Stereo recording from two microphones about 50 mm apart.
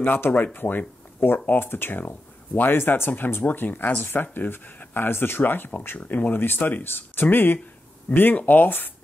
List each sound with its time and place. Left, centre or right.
0.3 s speech: left